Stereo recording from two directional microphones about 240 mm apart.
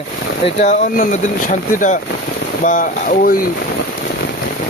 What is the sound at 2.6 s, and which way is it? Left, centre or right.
Speech, left.